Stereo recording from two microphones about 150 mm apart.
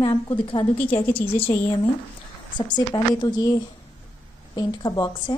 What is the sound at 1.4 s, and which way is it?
A woman's voice, 40° left (ahead or behind).